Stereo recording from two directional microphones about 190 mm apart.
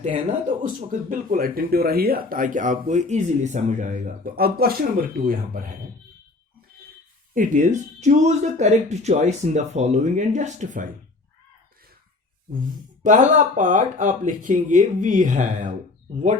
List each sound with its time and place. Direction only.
0.4 s speech: 40° right (ahead or behind)
7.3 s speech: 45° right (ahead or behind)
12.5 s speech: 45° right (ahead or behind)